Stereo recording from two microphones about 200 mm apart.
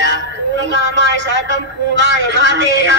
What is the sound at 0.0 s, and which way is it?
A woman's voice, 65° right (ahead or behind).